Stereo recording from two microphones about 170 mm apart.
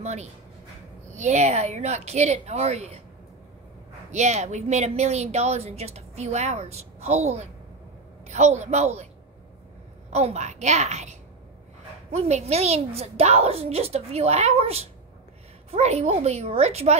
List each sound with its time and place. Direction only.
0.0 s speech: 40° right (ahead or behind)
4.1 s speech: 45° right (ahead or behind)
10.1 s speech: 40° right (ahead or behind)